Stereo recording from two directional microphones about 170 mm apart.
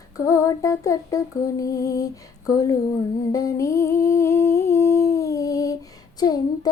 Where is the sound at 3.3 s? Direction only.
20° left (ahead or behind).